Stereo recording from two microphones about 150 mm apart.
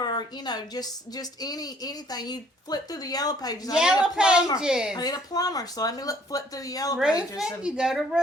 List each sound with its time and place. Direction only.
0.0 s speech: 30° left (ahead or behind)
3.8 s a woman's voice: 5° right (ahead or behind)
4.9 s speech: 25° left (ahead or behind)
7.2 s a woman's voice: 5° right (ahead or behind)